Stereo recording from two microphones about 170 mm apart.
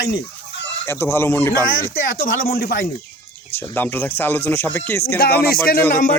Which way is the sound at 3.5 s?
10° left (ahead or behind).